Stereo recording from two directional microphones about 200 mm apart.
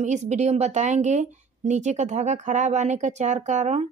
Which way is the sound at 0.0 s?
35° right (ahead or behind).